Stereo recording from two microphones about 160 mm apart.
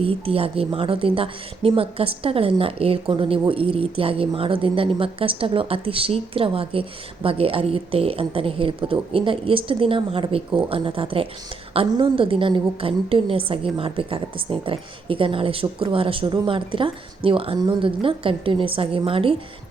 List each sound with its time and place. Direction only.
0.0 s a woman's voice: 35° right (ahead or behind)